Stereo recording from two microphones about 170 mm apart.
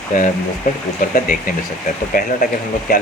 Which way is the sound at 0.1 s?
50° left (ahead or behind).